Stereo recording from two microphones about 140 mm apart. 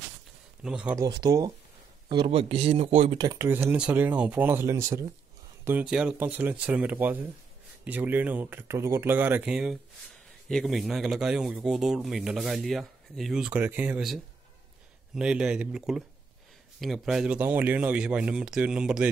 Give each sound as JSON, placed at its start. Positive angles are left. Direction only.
{"t": 0.7, "sound": "speech", "side_deg": -5}
{"t": 0.9, "sound": "speech", "side_deg": -30}
{"t": 3.2, "sound": "speech", "side_deg": -25}
{"t": 5.7, "sound": "speech", "side_deg": -10}